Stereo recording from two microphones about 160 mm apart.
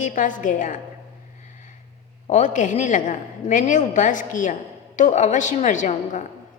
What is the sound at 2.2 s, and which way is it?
A woman's voice, 50° left (ahead or behind).